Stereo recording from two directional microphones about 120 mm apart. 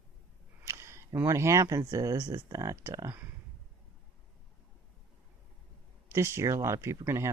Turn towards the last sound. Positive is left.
turn(degrees=-25)  # may be behind; listen again after turning